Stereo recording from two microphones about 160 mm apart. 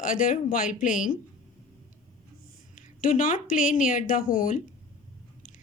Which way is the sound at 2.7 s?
55° left (ahead or behind).